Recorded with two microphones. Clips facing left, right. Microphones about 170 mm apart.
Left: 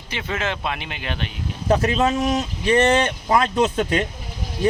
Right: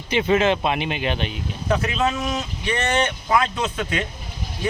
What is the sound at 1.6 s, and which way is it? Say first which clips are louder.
Speech: left 3 dB; 35° left (ahead or behind).